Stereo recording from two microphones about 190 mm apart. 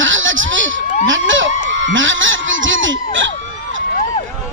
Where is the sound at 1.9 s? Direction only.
85° right.